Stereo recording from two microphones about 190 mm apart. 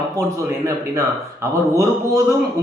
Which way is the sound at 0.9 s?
15° right (ahead or behind).